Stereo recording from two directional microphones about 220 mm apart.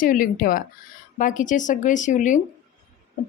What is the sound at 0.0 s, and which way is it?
A woman's voice, 40° left (ahead or behind).